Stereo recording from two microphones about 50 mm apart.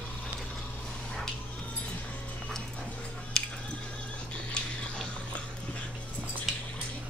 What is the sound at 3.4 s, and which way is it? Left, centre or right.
Music, centre.